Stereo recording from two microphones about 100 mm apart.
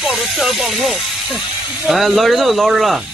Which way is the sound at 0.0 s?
Centre (ahead or behind).